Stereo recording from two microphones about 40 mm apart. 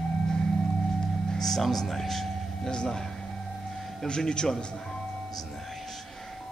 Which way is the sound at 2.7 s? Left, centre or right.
Left.